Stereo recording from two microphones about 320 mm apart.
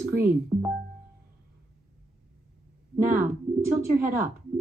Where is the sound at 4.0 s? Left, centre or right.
Centre.